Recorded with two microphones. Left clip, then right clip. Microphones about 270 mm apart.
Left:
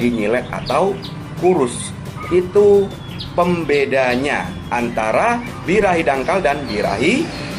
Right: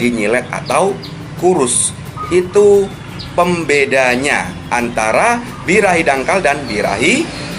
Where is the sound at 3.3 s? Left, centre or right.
Centre.